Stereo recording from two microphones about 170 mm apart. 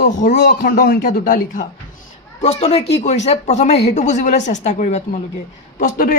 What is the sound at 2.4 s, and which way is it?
Speech, 35° left (ahead or behind).